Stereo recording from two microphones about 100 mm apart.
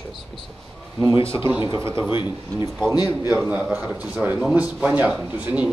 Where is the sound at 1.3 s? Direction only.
25° right (ahead or behind).